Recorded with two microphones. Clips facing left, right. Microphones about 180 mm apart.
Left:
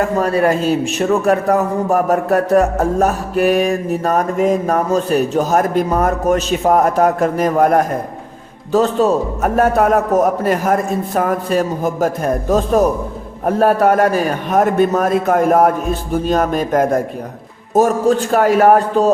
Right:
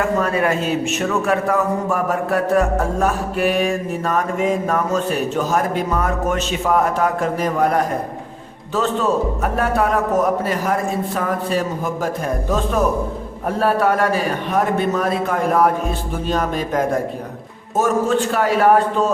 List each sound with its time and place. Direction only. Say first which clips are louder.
0.0 s a man's voice: left 4 dB; 35° left (ahead or behind)